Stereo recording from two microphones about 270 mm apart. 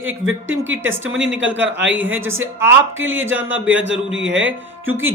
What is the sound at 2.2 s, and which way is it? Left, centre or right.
Speech, right.